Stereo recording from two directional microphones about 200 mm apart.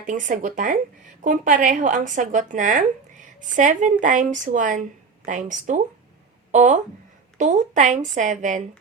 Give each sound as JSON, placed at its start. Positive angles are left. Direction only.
{"t": 0.0, "sound": "speech", "side_deg": -40}